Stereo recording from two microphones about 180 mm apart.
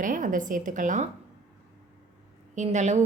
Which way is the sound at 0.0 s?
45° right (ahead or behind).